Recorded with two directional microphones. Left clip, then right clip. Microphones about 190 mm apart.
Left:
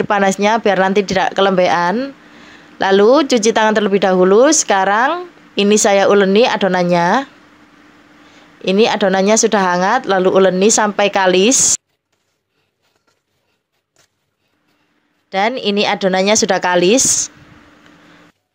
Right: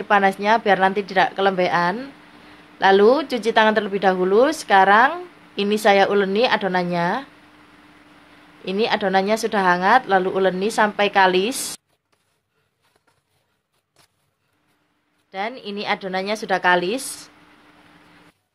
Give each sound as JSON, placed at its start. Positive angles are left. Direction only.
{"t": 0.0, "sound": "speech", "side_deg": 40}
{"t": 8.6, "sound": "speech", "side_deg": 35}
{"t": 15.2, "sound": "speech", "side_deg": 40}